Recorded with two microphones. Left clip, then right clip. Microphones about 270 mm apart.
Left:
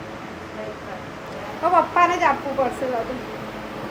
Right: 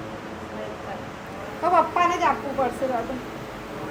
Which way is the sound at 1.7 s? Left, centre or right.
Centre.